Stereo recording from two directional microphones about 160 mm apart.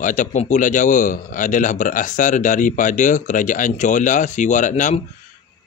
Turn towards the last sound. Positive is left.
turn(degrees=50)  # may be behind; listen again after turning